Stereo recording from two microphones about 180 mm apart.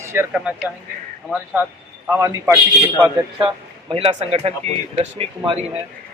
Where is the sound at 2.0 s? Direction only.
15° right (ahead or behind).